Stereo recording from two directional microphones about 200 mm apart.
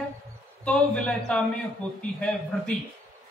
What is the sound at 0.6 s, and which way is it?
A man's voice, 5° left (ahead or behind).